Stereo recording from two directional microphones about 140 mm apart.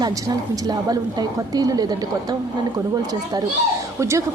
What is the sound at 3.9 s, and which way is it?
Speech, 20° right (ahead or behind).